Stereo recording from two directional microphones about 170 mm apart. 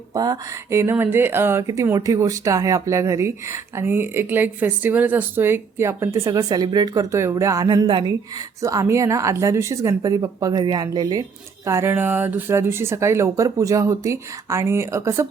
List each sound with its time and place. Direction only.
0.1 s speech: 20° right (ahead or behind)